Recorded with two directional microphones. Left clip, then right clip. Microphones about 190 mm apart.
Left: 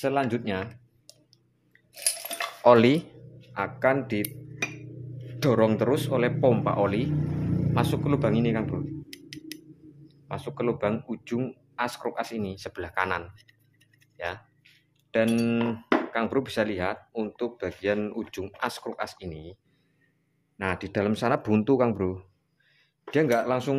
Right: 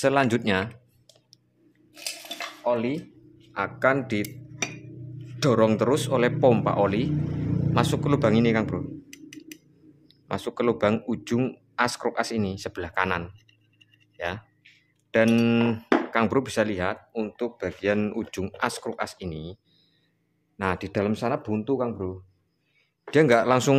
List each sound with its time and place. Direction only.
0.0 s speech: 25° right (ahead or behind)
2.0 s cutlery: 25° left (ahead or behind)
2.6 s speech: 55° left (ahead or behind)
3.5 s a man's voice: 5° right (ahead or behind)
5.4 s speech: 5° right (ahead or behind)
9.1 s scissors: 40° left (ahead or behind)
10.0 s speech: 20° right (ahead or behind)
20.5 s speech: 15° right (ahead or behind)
21.1 s a man's voice: 5° left (ahead or behind)
21.4 s speech: 25° left (ahead or behind)
23.0 s speech: 20° right (ahead or behind)